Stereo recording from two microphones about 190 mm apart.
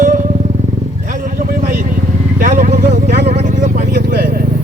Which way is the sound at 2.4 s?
45° right (ahead or behind).